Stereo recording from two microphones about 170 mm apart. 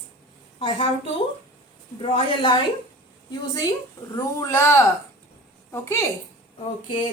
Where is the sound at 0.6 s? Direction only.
30° left (ahead or behind); by 6.0 s 15° left (ahead or behind).